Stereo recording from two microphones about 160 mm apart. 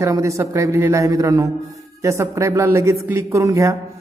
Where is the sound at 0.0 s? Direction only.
20° right (ahead or behind).